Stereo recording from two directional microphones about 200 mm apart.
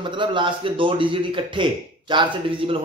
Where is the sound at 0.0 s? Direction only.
25° right (ahead or behind).